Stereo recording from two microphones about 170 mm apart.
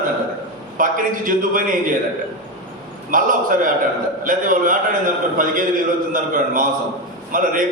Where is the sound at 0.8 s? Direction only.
55° right (ahead or behind).